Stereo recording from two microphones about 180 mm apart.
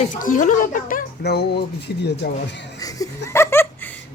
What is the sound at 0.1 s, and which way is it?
A woman's voice, 45° left (ahead or behind).